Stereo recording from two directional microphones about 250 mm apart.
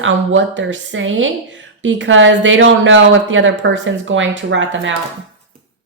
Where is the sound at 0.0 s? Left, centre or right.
Right.